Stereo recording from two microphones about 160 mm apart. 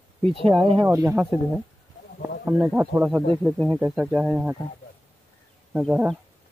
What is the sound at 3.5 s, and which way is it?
Speech, 10° left (ahead or behind).